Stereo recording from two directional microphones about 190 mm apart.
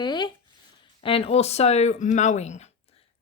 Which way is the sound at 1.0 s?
30° left (ahead or behind).